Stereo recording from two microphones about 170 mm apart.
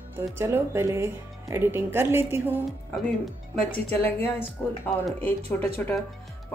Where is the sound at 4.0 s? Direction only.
10° left (ahead or behind).